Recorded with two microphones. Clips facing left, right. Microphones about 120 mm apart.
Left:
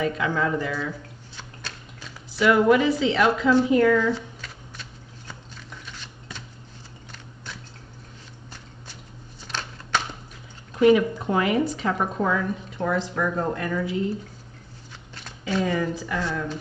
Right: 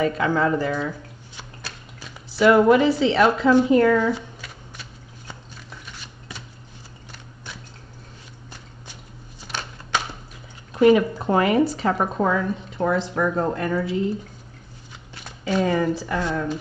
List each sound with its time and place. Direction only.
0.0 s speech: 40° right (ahead or behind)
1.3 s squish: 10° right (ahead or behind)
2.3 s speech: 35° right (ahead or behind)
4.1 s shuffling cards: 10° right (ahead or behind)
9.5 s a sound: 10° right (ahead or behind)
10.8 s speech: 45° right (ahead or behind)
15.6 s speech: 40° right (ahead or behind)